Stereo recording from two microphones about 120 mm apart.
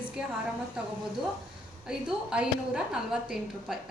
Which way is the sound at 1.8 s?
5° right (ahead or behind).